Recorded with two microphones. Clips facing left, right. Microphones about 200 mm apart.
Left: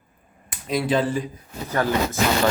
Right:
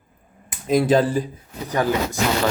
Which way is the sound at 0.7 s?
45° right (ahead or behind).